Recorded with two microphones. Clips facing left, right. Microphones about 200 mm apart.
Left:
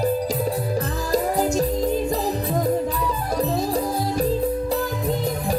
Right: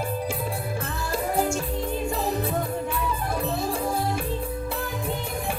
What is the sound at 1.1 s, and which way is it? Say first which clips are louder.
Music: left 5 dB; 40° left (ahead or behind).